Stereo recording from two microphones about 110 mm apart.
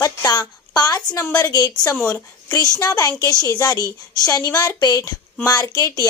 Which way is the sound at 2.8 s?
30° left (ahead or behind).